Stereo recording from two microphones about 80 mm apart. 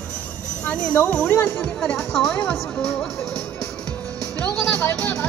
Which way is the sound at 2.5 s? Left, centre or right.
Centre.